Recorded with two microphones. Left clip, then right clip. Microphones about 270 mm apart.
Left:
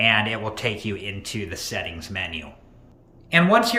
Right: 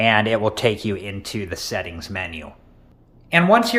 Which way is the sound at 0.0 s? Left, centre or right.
Right.